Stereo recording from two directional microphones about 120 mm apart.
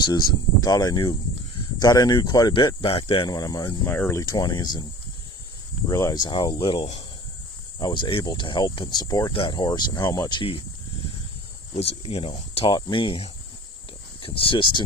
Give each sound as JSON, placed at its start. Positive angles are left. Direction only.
{"t": 0.6, "sound": "speech", "side_deg": 30}
{"t": 2.5, "sound": "speech", "side_deg": 45}
{"t": 3.2, "sound": "speech", "side_deg": 35}
{"t": 3.8, "sound": "speech", "side_deg": 20}
{"t": 5.9, "sound": "speech", "side_deg": 25}
{"t": 6.2, "sound": "speech", "side_deg": 40}